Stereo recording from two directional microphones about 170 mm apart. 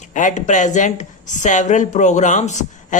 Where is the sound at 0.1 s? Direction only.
45° left (ahead or behind).